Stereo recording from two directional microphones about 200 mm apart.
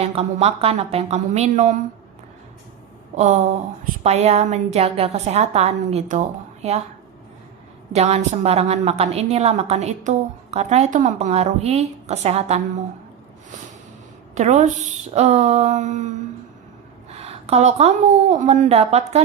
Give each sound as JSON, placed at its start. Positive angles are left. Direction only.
{"t": 0.0, "sound": "a woman's voice", "side_deg": -30}
{"t": 3.2, "sound": "a woman's voice", "side_deg": -35}
{"t": 7.9, "sound": "a woman's voice", "side_deg": -30}
{"t": 14.3, "sound": "a woman's voice", "side_deg": -35}